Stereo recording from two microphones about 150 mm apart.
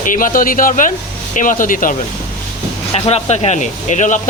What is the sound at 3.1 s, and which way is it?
Speech, 45° left (ahead or behind).